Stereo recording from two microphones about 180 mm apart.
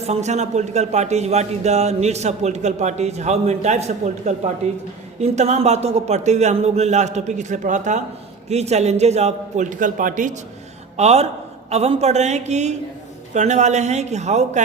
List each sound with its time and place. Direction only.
0.0 s speech: 40° right (ahead or behind)
10.9 s speech: 35° right (ahead or behind)